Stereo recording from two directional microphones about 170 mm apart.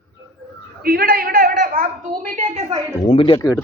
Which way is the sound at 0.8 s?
60° right (ahead or behind).